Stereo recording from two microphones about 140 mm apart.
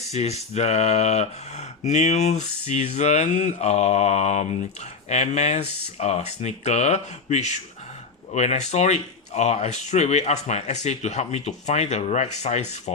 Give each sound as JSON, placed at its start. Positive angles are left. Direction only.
{"t": 0.1, "sound": "speech", "side_deg": 50}